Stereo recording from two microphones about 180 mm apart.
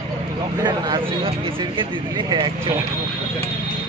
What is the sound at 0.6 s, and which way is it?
Speech, 20° right (ahead or behind).